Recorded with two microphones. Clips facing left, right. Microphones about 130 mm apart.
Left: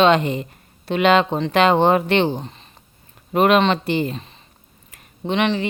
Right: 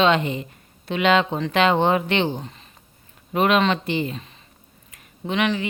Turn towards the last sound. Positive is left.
turn(degrees=30)  # may be behind; listen again after turning